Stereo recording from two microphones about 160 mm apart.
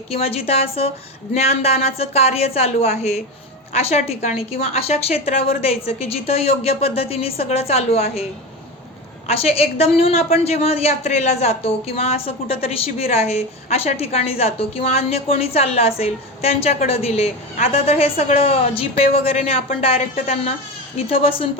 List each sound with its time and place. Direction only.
0.1 s a woman's voice: 40° left (ahead or behind)
9.2 s a woman's voice: 40° left (ahead or behind)
21.1 s a woman's voice: 35° left (ahead or behind)